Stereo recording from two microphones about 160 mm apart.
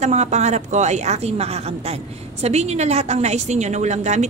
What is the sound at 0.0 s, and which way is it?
A woman's voice, 45° right (ahead or behind).